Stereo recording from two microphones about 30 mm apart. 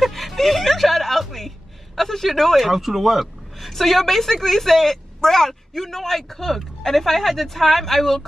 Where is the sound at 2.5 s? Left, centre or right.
Centre.